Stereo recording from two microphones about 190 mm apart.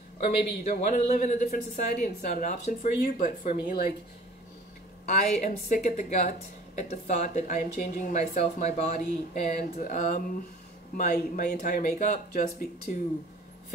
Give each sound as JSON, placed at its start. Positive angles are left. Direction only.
{"t": 0.7, "sound": "speech", "side_deg": 40}
{"t": 3.5, "sound": "speech", "side_deg": 55}
{"t": 5.0, "sound": "speech", "side_deg": 40}
{"t": 12.3, "sound": "speech", "side_deg": 55}